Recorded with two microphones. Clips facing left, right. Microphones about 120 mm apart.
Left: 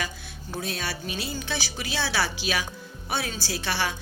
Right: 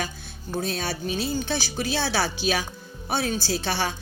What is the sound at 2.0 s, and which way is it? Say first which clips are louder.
A woman's voice: even; 30° right (ahead or behind).